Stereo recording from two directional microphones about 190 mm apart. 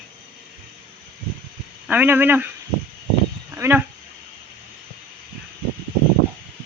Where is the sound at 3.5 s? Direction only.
10° right (ahead or behind).